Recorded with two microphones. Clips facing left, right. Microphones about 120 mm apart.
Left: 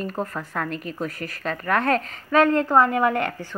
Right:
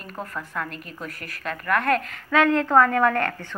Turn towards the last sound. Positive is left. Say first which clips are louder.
# even
turn(degrees=15)  # may be behind; listen again after turning